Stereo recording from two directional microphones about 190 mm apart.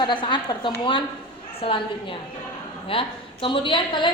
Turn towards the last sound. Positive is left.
turn(degrees=25)  # may be behind; listen again after turning